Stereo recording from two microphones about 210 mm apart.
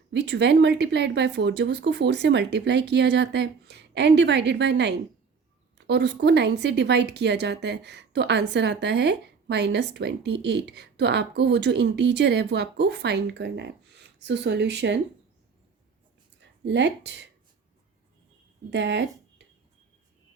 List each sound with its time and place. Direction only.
0.1 s speech: 55° right (ahead or behind)
16.4 s speech: 55° right (ahead or behind)
18.7 s speech: 55° right (ahead or behind)